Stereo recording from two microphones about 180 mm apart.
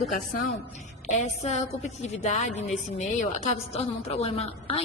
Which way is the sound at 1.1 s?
40° left (ahead or behind).